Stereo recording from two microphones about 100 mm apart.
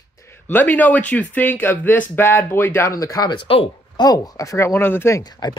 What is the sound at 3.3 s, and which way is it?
Speech, 65° left (ahead or behind).